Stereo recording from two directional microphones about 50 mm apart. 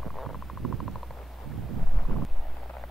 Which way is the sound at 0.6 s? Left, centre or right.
Centre.